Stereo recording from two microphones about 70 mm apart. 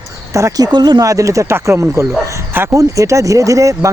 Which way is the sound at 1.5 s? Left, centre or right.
Right.